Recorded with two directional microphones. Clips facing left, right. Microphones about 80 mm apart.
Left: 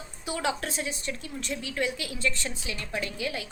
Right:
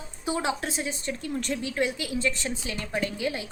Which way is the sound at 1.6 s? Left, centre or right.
Right.